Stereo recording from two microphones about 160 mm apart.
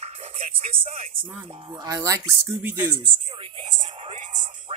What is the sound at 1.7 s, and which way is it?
Speech, 20° right (ahead or behind).